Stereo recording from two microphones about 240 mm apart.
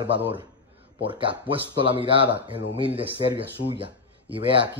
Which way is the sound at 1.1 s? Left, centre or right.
Right.